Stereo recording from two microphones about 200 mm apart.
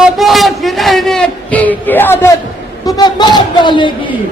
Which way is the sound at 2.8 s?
20° left (ahead or behind).